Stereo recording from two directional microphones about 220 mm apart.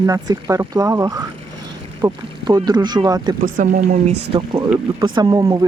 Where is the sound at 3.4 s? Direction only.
40° right (ahead or behind).